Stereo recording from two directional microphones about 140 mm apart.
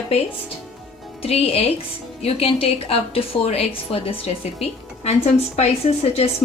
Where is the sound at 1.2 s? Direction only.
45° left (ahead or behind).